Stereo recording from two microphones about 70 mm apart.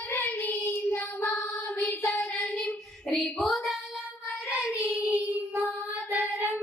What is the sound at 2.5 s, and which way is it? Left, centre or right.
Child singing, centre.